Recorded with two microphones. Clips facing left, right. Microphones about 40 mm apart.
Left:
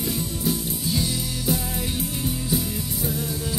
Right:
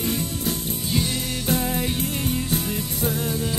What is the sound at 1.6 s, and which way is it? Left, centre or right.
Music, right.